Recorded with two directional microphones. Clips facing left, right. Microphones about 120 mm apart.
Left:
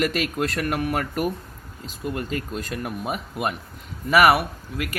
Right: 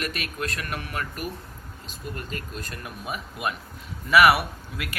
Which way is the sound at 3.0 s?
55° left (ahead or behind).